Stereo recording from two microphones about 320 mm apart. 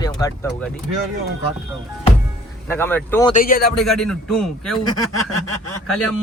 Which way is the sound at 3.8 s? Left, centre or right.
Centre.